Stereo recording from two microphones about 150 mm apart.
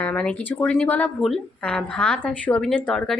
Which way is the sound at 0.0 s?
10° left (ahead or behind).